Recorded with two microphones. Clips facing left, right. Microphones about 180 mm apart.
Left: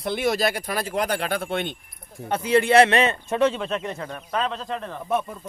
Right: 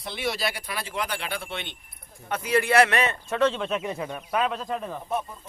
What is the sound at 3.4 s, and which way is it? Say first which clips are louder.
Speech: left 2 dB; 5° left (ahead or behind).